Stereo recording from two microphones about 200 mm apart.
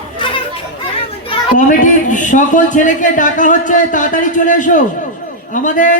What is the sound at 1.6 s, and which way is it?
A man's voice, 40° left (ahead or behind).